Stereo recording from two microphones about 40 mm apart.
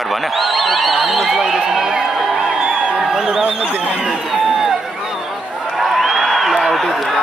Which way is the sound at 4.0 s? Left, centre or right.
Centre.